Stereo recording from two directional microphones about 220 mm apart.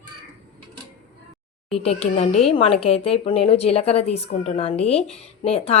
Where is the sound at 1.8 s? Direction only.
25° left (ahead or behind).